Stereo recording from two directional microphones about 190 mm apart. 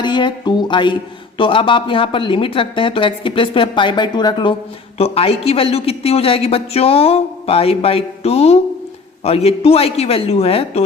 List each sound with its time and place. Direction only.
0.0 s a man's voice: 25° left (ahead or behind)